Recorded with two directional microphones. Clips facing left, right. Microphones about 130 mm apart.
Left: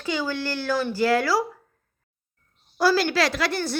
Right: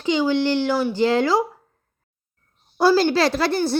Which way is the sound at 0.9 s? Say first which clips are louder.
Right 2 dB; 20° right (ahead or behind).